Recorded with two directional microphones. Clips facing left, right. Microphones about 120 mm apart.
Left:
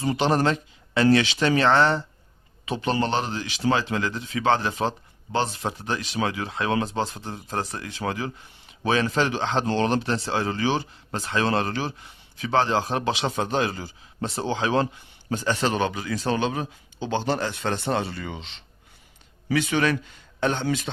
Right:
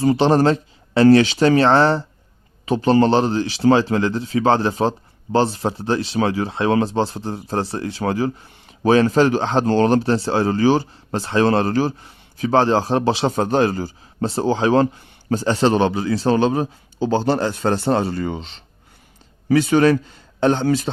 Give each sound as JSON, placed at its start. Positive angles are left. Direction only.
{"t": 0.0, "sound": "speech", "side_deg": -35}